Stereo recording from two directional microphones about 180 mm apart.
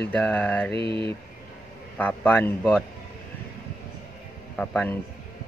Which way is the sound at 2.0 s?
10° left (ahead or behind).